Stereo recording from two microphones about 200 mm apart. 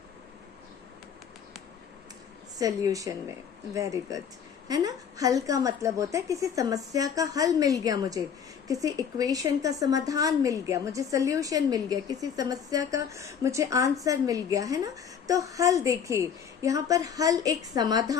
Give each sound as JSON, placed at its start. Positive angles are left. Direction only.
{"t": 2.6, "sound": "a woman's voice", "side_deg": -15}